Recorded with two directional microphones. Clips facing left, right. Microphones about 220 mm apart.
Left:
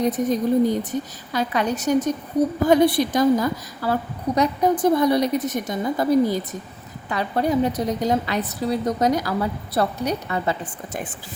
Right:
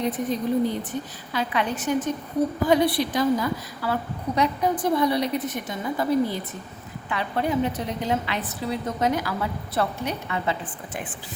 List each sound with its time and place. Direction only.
0.0 s a woman's voice: 40° left (ahead or behind)